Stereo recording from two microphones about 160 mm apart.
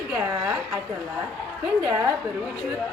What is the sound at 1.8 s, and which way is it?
Speech, 10° right (ahead or behind).